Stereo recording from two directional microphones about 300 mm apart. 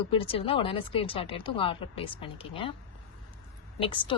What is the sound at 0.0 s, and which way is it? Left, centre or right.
A woman's voice, centre.